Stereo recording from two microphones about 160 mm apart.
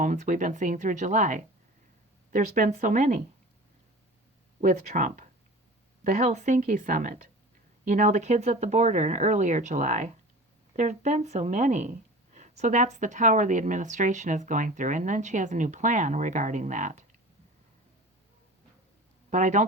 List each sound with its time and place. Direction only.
0.0 s speech: 55° right (ahead or behind)
4.6 s speech: 50° right (ahead or behind)
19.3 s speech: 50° right (ahead or behind)